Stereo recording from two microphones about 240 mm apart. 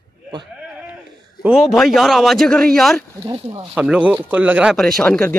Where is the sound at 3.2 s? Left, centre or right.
Right.